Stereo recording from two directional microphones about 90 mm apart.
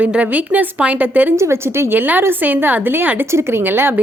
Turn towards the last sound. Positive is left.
turn(degrees=-25)  # may be behind; listen again after turning